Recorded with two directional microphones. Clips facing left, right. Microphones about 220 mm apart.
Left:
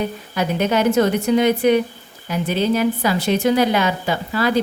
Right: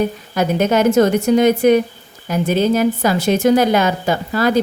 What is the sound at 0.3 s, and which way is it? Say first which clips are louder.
A woman's voice: right 4 dB; 45° right (ahead or behind).